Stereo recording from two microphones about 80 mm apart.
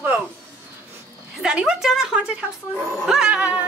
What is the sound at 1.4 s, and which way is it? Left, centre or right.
A woman's voice, centre.